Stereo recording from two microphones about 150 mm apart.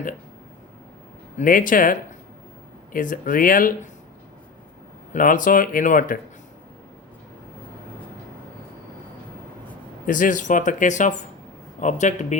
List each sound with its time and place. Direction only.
1.4 s speech: 65° left (ahead or behind)
5.1 s speech: 60° left (ahead or behind)
10.1 s speech: 60° left (ahead or behind)